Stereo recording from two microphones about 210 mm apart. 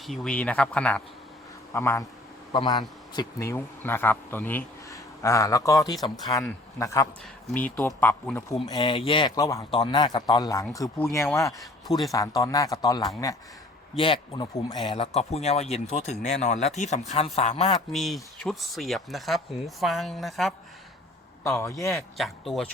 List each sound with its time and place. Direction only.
0.0 s a man's voice: centre (ahead or behind)
8.5 s a man's voice: 20° left (ahead or behind)
17.9 s speech: centre (ahead or behind)
21.6 s a man's voice: 15° left (ahead or behind)
22.2 s speech: centre (ahead or behind)